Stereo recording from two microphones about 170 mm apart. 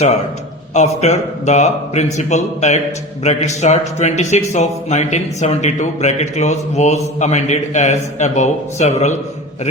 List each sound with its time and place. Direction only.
0.7 s a man's voice: 45° left (ahead or behind)